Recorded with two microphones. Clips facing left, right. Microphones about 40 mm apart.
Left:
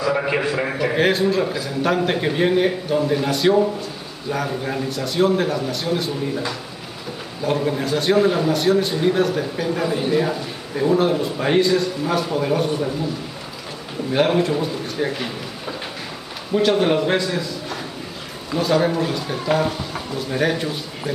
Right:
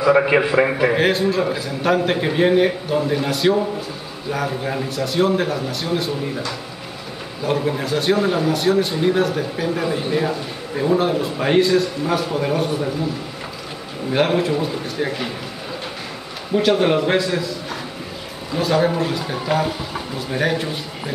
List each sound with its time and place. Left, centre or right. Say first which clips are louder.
0.2 s a man's voice: right 5 dB; right
0.9 s a man's voice: even; centre
7.4 s a man's voice: even; centre
14.1 s a man's voice: even; centre
16.5 s a man's voice: right 1 dB; centre